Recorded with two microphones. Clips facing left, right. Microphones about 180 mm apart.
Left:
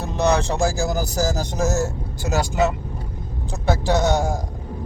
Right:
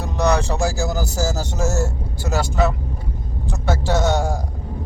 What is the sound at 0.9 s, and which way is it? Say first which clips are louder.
Speech: left 1 dB; 15° left (ahead or behind).